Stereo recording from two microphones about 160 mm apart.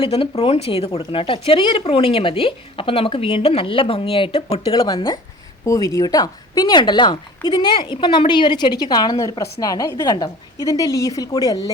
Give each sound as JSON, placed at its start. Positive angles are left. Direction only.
{"t": 0.0, "sound": "speech", "side_deg": 40}
{"t": 4.6, "sound": "speech", "side_deg": 25}